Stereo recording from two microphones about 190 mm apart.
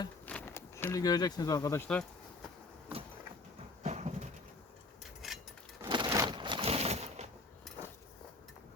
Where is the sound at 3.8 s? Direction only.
35° right (ahead or behind).